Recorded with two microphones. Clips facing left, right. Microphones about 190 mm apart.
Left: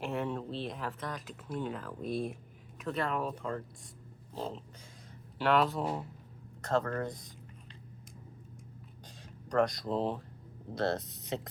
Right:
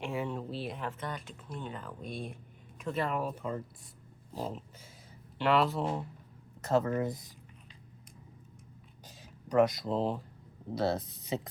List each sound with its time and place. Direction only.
0.0 s speech: centre (ahead or behind)
9.0 s speech: 5° right (ahead or behind)